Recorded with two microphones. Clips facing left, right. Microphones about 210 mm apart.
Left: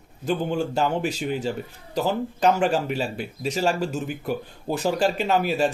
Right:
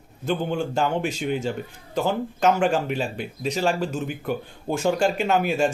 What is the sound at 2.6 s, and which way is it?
A man's voice, 40° left (ahead or behind).